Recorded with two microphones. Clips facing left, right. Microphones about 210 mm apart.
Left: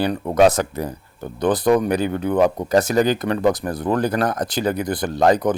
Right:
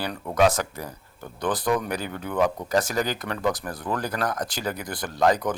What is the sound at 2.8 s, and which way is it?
Speech, 20° left (ahead or behind).